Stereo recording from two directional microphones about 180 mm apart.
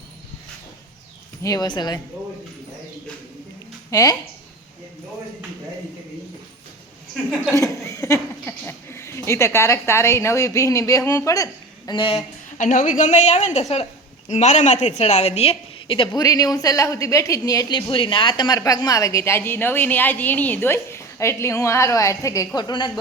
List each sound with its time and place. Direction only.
1.4 s a woman's voice: 20° left (ahead or behind)
3.9 s a woman's voice: 20° left (ahead or behind)
7.5 s speech: 20° left (ahead or behind)
11.9 s a woman's voice: 30° left (ahead or behind)
12.5 s a woman's voice: 45° left (ahead or behind); by 22.9 s 25° left (ahead or behind)